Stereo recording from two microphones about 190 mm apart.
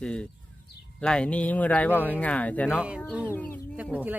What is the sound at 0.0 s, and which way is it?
Speech, 5° left (ahead or behind).